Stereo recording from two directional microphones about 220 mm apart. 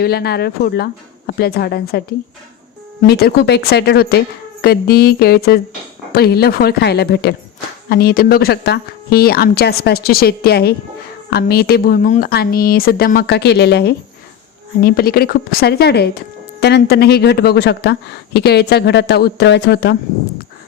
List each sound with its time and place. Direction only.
0.0 s speech: 45° left (ahead or behind)